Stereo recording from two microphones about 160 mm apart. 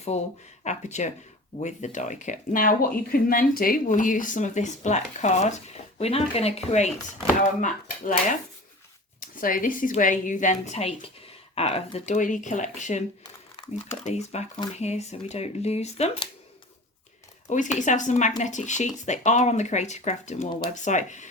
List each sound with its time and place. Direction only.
0.1 s speech: 45° left (ahead or behind)
7.6 s speech: 55° left (ahead or behind)
9.2 s a woman's voice: 60° left (ahead or behind)
13.6 s crumpling: 30° left (ahead or behind)
13.9 s speech: 45° left (ahead or behind)
17.5 s speech: 50° left (ahead or behind)